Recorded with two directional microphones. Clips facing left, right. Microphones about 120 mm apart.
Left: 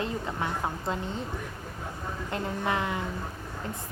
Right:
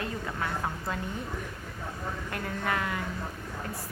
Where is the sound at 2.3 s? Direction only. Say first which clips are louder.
Left 3 dB; 20° left (ahead or behind).